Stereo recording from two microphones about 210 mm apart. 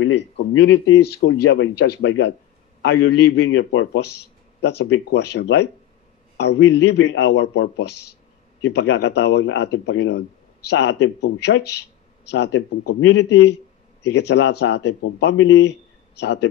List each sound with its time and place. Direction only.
0.1 s speech: 55° left (ahead or behind)